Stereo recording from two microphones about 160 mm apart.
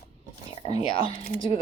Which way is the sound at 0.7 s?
35° left (ahead or behind).